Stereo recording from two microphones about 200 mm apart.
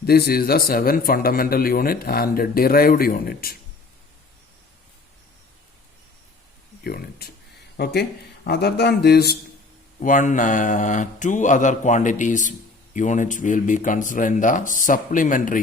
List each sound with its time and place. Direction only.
0.0 s a man's voice: 50° left (ahead or behind)
6.8 s a man's voice: 50° left (ahead or behind)
10.0 s mantra: 40° left (ahead or behind)